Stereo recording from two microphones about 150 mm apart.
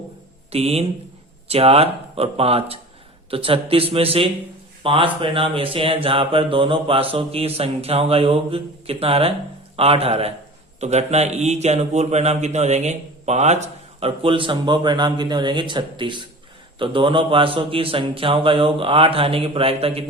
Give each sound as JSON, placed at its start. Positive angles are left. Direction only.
{"t": 0.5, "sound": "speech", "side_deg": -40}